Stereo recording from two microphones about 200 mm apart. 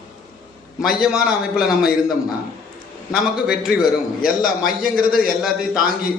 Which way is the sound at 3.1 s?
5° right (ahead or behind).